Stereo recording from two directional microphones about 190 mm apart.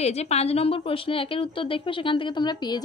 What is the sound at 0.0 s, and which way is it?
A woman's voice, 35° left (ahead or behind).